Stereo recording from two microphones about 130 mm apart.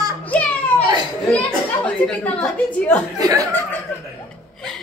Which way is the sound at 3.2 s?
25° right (ahead or behind).